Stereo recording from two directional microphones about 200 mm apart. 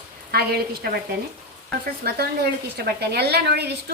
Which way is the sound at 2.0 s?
50° right (ahead or behind).